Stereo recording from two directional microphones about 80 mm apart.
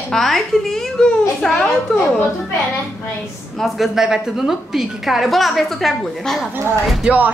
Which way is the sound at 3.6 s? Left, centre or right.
Centre.